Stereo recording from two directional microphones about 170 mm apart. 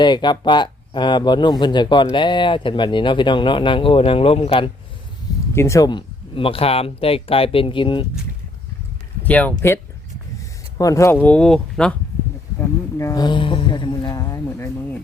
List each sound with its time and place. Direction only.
0.0 s speech: 25° left (ahead or behind)
5.5 s speech: 15° left (ahead or behind)
9.2 s speech: 10° left (ahead or behind)
12.5 s speech: 20° left (ahead or behind)